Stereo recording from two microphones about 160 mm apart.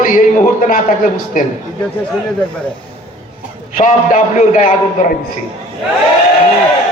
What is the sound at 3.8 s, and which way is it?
A man's voice, 55° left (ahead or behind).